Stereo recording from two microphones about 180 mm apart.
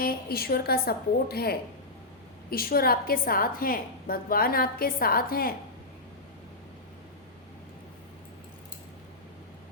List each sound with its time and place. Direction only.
0.0 s a woman's voice: 55° left (ahead or behind)